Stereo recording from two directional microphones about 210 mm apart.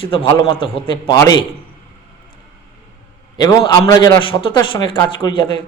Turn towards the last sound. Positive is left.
turn(degrees=20)  # may be behind; listen again after turning